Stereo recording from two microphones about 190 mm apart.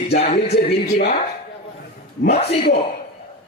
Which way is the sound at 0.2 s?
35° left (ahead or behind).